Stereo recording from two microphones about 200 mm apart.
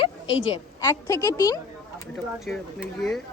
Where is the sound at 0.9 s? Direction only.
15° left (ahead or behind).